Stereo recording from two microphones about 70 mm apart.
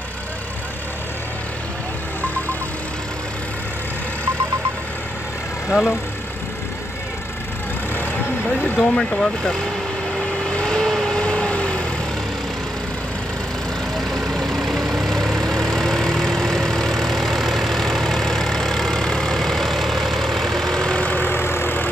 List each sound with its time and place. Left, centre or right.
5.7 s speech: centre
8.5 s vehicle: centre
8.7 s speech: centre
10.1 s vehicle: centre
13.9 s vehicle: centre; by 21.8 s left